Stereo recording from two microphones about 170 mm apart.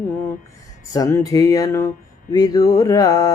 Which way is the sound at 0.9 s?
20° left (ahead or behind).